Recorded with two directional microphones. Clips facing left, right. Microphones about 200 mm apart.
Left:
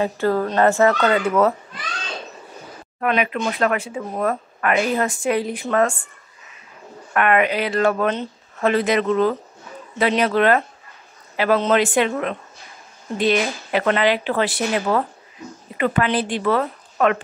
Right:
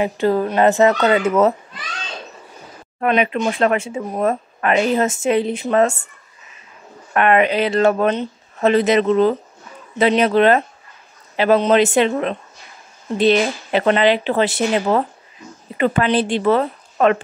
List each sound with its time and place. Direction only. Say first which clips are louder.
0.0 s speech: right 2 dB; 15° right (ahead or behind)
3.0 s speech: right 3 dB; 25° right (ahead or behind)
7.2 s speech: right 3 dB; 25° right (ahead or behind)